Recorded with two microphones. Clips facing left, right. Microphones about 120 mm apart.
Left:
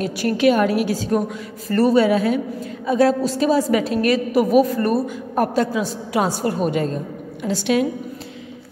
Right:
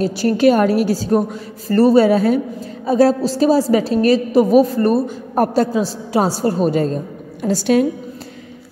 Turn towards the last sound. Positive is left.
turn(degrees=-40)  # may be behind; listen again after turning